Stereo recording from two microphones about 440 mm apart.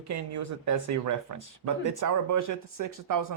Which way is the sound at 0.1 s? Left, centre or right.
Right.